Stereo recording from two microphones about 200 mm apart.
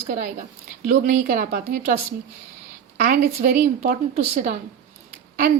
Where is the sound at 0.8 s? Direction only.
40° right (ahead or behind).